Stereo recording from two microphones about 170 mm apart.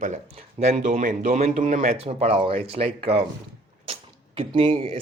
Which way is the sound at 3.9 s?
35° right (ahead or behind).